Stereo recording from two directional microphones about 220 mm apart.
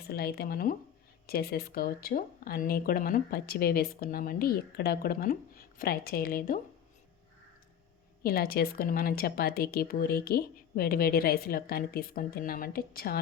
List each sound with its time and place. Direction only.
0.1 s speech: 45° left (ahead or behind)
8.2 s speech: 45° left (ahead or behind)